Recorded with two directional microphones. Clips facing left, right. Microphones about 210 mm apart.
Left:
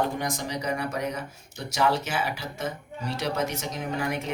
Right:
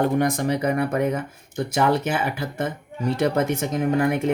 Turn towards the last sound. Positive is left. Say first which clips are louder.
# right 9 dB
turn(degrees=-55)  # may be behind; listen again after turning